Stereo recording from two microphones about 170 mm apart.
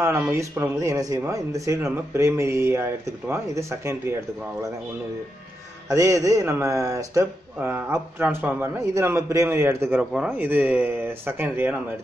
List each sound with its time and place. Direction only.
0.0 s speech: 15° right (ahead or behind)
5.9 s speech: 20° right (ahead or behind)